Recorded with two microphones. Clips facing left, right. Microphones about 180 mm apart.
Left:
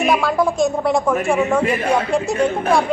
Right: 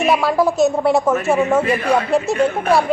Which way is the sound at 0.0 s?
5° right (ahead or behind).